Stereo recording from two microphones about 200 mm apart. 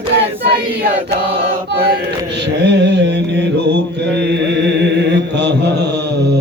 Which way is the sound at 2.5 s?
60° right (ahead or behind).